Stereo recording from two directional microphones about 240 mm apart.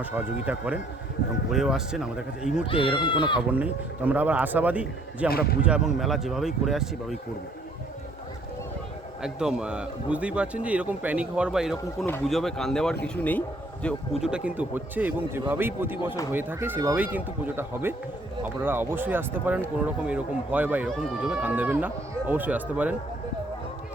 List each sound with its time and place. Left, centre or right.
0.0 s a man's voice: centre
2.6 s speech: left
3.5 s a man's voice: centre
9.2 s a man's voice: centre